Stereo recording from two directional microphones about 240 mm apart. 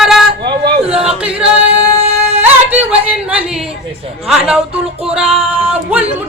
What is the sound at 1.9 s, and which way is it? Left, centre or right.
Singing, right.